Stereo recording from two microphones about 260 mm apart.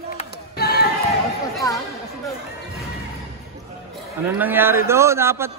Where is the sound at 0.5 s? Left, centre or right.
Left.